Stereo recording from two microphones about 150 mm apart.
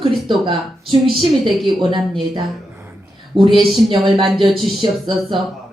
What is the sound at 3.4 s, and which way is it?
Speech, 35° right (ahead or behind).